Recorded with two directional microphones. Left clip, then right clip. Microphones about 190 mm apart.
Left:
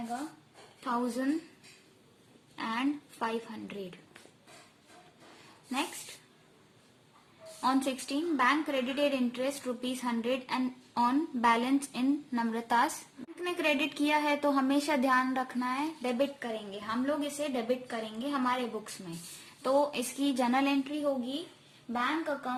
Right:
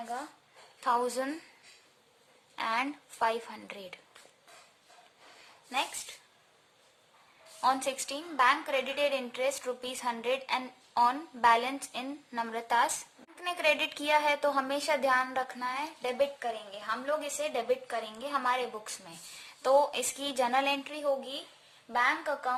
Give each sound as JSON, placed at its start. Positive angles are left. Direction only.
{"t": 0.9, "sound": "a woman's voice", "side_deg": -35}
{"t": 2.6, "sound": "a woman's voice", "side_deg": -30}
{"t": 7.6, "sound": "a woman's voice", "side_deg": -20}
{"t": 19.6, "sound": "a woman's voice", "side_deg": -25}